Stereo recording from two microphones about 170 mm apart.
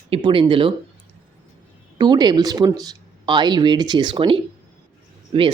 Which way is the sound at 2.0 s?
25° right (ahead or behind).